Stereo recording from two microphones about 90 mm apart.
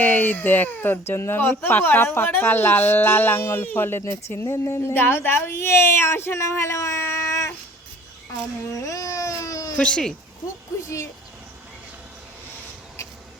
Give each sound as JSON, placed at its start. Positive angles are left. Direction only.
{"t": 0.0, "sound": "speech", "side_deg": 20}
{"t": 8.9, "sound": "baby cry", "side_deg": 35}
{"t": 9.7, "sound": "speech", "side_deg": 10}